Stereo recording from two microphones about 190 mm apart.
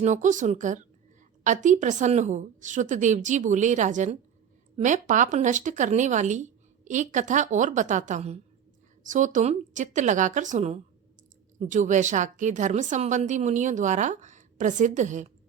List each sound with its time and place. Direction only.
0.0 s a woman's voice: 40° right (ahead or behind)